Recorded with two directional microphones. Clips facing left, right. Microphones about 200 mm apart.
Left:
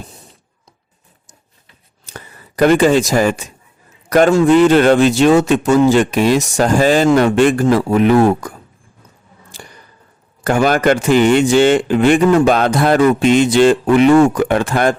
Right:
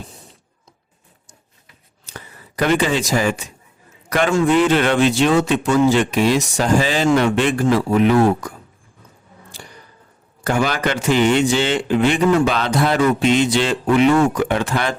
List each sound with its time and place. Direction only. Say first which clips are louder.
2.0 s a man's voice: left 2 dB; 45° left (ahead or behind)
10.4 s a man's voice: left 6 dB; 50° left (ahead or behind)